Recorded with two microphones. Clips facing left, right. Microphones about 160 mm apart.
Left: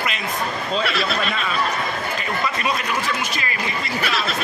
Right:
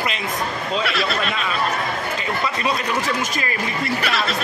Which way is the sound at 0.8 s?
Centre (ahead or behind).